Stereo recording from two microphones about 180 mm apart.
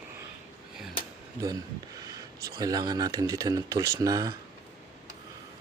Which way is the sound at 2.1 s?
20° right (ahead or behind).